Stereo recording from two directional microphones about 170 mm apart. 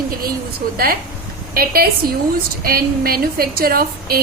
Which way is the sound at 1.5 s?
60° right (ahead or behind).